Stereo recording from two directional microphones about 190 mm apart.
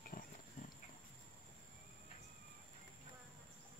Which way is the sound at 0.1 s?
45° left (ahead or behind).